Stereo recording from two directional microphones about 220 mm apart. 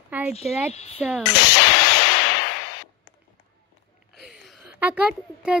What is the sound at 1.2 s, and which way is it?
Speech, 55° left (ahead or behind).